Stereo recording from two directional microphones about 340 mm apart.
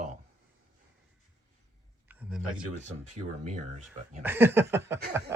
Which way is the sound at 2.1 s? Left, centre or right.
Centre.